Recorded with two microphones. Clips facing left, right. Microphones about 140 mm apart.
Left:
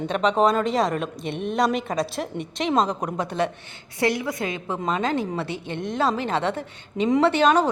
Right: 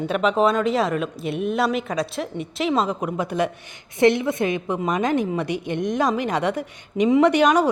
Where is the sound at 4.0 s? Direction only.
25° right (ahead or behind).